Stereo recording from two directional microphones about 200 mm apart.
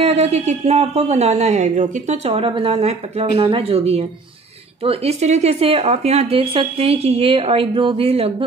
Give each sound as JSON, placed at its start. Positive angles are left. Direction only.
{"t": 0.0, "sound": "speech", "side_deg": -30}